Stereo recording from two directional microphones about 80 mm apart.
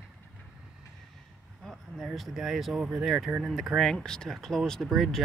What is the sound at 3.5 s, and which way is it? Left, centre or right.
Speech, centre.